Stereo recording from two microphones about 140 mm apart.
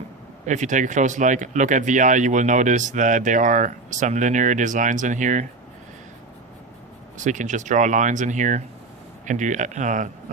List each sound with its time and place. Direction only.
0.4 s speech: 60° right (ahead or behind)
7.2 s speech: 60° right (ahead or behind)